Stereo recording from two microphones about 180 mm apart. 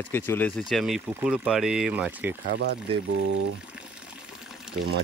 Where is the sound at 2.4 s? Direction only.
70° right (ahead or behind).